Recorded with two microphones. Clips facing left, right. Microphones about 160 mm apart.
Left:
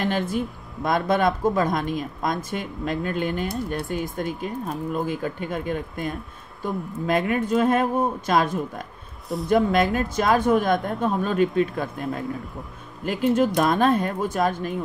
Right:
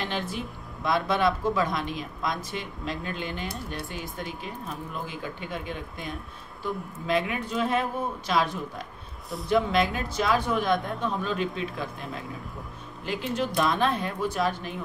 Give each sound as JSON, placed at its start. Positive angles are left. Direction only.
{"t": 0.0, "sound": "speech", "side_deg": 50}